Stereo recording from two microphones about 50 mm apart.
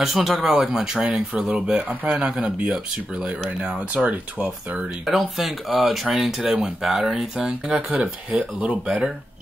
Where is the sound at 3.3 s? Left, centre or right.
Right.